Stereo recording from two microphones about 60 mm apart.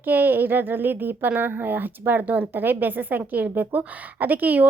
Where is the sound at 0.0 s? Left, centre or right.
Right.